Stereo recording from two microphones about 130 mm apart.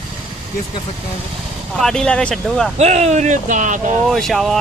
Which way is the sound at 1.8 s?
5° left (ahead or behind).